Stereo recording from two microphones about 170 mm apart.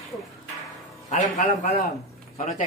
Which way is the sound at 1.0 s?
50° left (ahead or behind).